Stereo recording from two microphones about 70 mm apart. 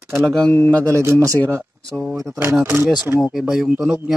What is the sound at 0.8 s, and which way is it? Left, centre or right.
Speech, right.